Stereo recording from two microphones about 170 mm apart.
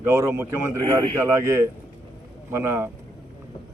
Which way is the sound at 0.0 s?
15° right (ahead or behind).